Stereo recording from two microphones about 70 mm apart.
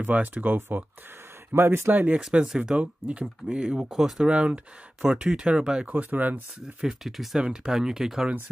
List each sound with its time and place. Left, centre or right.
0.0 s speech: right
2.4 s speech: centre
5.9 s speech: right
6.8 s speech: centre